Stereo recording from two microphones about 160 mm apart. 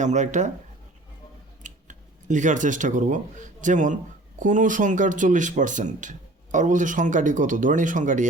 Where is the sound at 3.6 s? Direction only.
50° right (ahead or behind).